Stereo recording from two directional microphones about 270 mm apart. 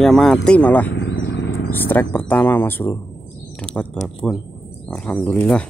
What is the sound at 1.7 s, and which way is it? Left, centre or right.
Speech, centre.